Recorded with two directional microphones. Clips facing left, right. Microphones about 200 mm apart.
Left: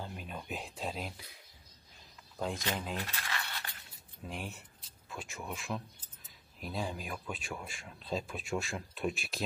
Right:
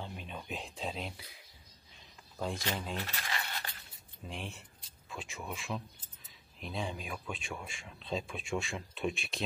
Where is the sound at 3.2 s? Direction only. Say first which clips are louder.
Right 1 dB; 20° right (ahead or behind).